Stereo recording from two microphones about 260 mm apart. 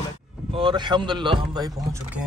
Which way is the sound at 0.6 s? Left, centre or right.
Centre.